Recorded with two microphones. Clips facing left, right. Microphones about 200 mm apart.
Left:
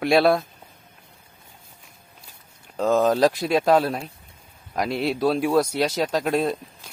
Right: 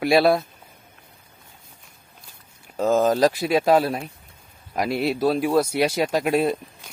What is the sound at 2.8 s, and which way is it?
Speech, 5° right (ahead or behind).